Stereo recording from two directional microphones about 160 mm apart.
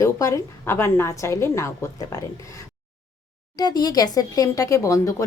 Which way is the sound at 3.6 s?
25° left (ahead or behind).